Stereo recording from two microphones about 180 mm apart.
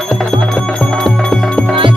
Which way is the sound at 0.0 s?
5° left (ahead or behind).